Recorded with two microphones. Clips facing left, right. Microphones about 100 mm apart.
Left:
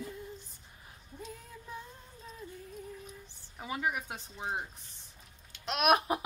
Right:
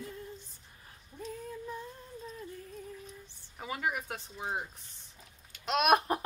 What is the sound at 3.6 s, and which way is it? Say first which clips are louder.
Speech: even; 20° left (ahead or behind).